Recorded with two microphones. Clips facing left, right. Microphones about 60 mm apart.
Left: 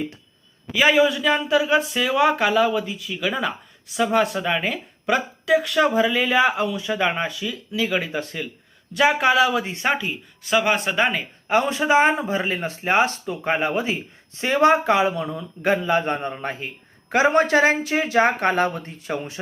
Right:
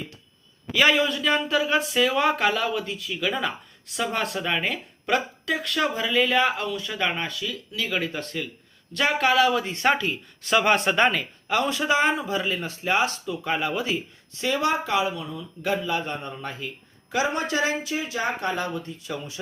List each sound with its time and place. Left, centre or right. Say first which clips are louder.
0.7 s speech: left 4 dB; centre
11.4 s speech: left 4 dB; left
17.1 s speech: left 8 dB; left